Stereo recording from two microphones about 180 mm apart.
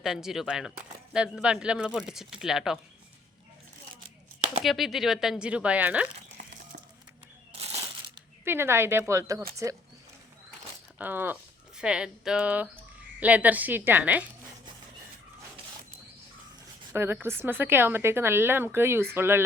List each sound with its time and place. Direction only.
0.0 s speech: 5° right (ahead or behind)
4.6 s speech: centre (ahead or behind)
6.4 s a sound: 55° right (ahead or behind)
7.5 s a sound: 35° right (ahead or behind)
8.4 s speech: 15° right (ahead or behind)
10.9 s speech: 10° right (ahead or behind)
16.9 s speech: 15° right (ahead or behind)